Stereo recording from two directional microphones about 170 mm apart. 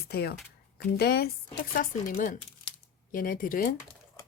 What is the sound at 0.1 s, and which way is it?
Speech, 70° left (ahead or behind).